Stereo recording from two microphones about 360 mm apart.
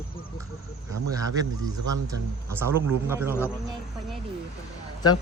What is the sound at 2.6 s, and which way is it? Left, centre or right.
Speech, centre.